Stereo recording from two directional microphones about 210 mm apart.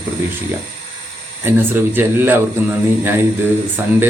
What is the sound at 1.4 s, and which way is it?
Speech, 10° right (ahead or behind).